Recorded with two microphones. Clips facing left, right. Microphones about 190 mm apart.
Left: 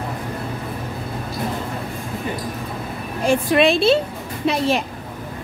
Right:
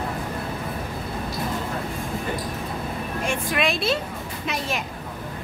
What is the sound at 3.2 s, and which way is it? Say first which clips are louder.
A woman's voice: left 10 dB; 30° left (ahead or behind).